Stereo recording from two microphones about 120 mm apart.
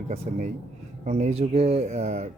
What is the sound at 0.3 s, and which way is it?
Speech, 80° right.